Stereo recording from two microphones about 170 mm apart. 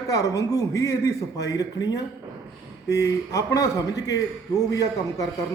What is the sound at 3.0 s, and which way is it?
Speech, 20° left (ahead or behind).